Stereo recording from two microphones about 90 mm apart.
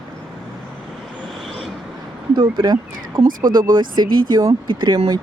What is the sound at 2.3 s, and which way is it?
Speech, 60° right (ahead or behind).